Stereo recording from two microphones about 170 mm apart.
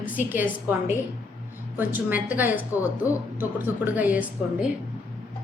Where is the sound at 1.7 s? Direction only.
10° right (ahead or behind).